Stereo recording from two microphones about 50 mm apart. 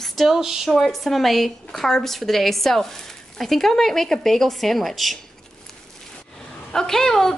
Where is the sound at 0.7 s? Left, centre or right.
Centre.